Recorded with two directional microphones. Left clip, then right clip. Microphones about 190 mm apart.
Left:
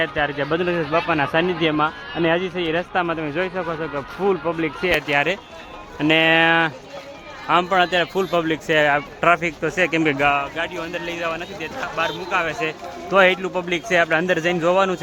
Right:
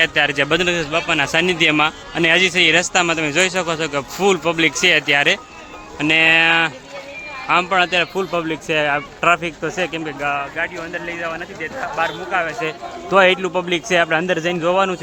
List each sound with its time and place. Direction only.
0.0 s a man's voice: 20° right (ahead or behind); by 1.3 s centre (ahead or behind)
1.3 s a man's voice: 15° right (ahead or behind)
4.9 s speech: 5° right (ahead or behind)
10.2 s speech: 45° left (ahead or behind)
10.6 s speech: 20° left (ahead or behind)
12.5 s speech: 10° right (ahead or behind)